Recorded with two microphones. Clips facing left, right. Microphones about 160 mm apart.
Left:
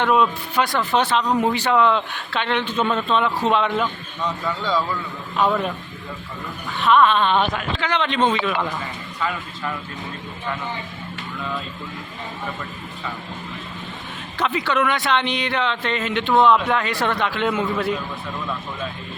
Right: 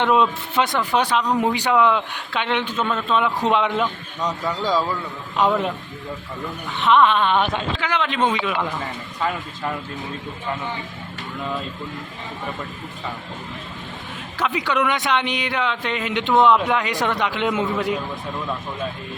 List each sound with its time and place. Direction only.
0.0 s a man's voice: 20° right (ahead or behind)
2.7 s speech: centre (ahead or behind)
3.2 s a man's voice: 15° right (ahead or behind)
6.7 s a man's voice: 20° right (ahead or behind)
14.3 s a man's voice: 10° right (ahead or behind)